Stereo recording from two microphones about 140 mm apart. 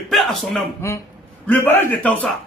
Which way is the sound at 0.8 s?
20° left (ahead or behind).